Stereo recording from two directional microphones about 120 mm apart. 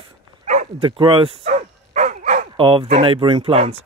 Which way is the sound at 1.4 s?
80° right.